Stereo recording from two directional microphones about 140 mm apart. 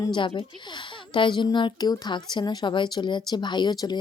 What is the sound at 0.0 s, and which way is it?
Speech, 35° left (ahead or behind).